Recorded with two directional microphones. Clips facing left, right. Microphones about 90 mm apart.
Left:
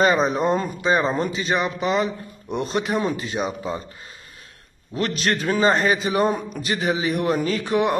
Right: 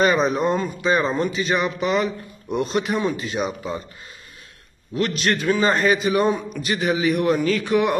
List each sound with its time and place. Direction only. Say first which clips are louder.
0.0 s speech: even; 30° left (ahead or behind)
4.9 s speech: right 1 dB; 35° left (ahead or behind)